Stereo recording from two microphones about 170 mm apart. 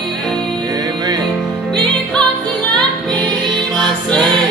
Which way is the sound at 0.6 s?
20° right (ahead or behind).